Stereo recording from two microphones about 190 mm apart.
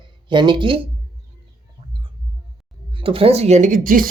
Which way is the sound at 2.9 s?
30° right (ahead or behind).